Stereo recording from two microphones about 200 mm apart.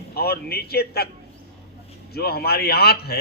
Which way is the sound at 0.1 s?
50° left (ahead or behind).